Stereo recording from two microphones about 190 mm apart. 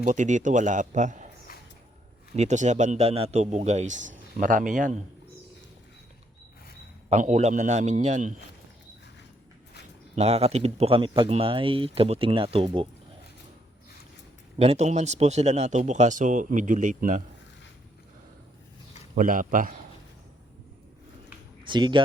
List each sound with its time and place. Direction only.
0.0 s a man's voice: 40° right (ahead or behind)
2.3 s a man's voice: 35° right (ahead or behind)
7.1 s a man's voice: 35° right (ahead or behind)
10.2 s speech: 30° right (ahead or behind)
14.6 s a man's voice: 35° right (ahead or behind)
19.1 s a man's voice: 45° right (ahead or behind)
21.7 s speech: 25° right (ahead or behind)